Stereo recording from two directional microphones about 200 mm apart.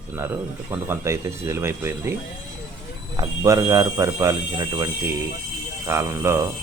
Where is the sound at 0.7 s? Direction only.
15° right (ahead or behind).